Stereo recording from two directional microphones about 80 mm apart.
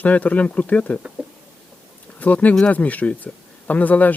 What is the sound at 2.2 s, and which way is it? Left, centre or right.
Speech, centre.